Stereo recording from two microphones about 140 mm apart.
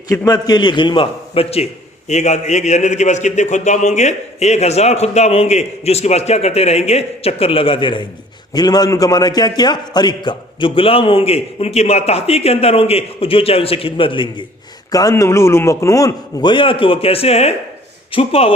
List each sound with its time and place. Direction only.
0.1 s a man's voice: 25° left (ahead or behind); by 1.6 s 45° left (ahead or behind)
2.0 s a man's voice: 55° left (ahead or behind); by 14.4 s 35° left (ahead or behind)
14.9 s a man's voice: 25° left (ahead or behind); by 18.5 s 45° left (ahead or behind)